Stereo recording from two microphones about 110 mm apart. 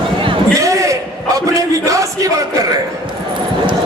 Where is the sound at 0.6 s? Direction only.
30° right (ahead or behind).